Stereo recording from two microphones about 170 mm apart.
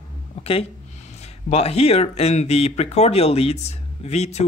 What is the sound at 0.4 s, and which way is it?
Speech, 35° left (ahead or behind).